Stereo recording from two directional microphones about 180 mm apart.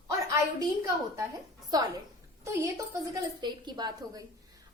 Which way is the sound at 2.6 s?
20° right (ahead or behind).